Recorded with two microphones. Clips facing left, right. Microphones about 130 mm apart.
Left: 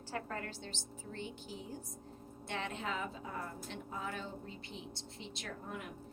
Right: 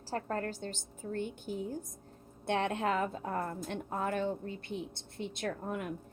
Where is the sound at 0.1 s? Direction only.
40° right (ahead or behind).